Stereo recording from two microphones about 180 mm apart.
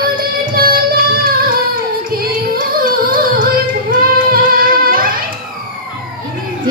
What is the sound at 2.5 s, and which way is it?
Music, 55° right (ahead or behind).